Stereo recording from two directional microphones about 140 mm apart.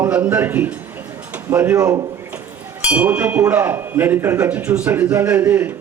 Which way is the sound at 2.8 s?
10° right (ahead or behind).